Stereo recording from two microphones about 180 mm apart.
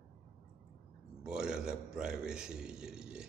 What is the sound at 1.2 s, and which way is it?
A man's voice, 5° right (ahead or behind).